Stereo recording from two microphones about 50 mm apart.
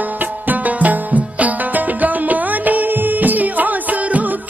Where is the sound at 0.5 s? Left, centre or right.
Right.